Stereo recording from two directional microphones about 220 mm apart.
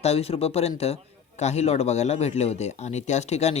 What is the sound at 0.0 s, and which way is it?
A man's voice, 25° left (ahead or behind).